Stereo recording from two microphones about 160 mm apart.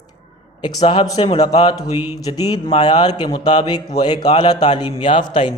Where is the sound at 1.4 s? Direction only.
40° left (ahead or behind).